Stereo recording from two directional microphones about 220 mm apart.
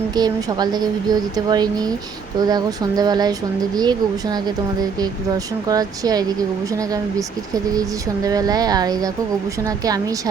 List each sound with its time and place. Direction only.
0.2 s speech: 20° right (ahead or behind)